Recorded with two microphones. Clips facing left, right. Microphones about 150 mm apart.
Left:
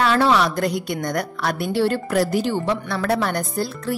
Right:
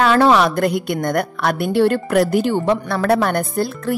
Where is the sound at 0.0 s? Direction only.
55° right (ahead or behind).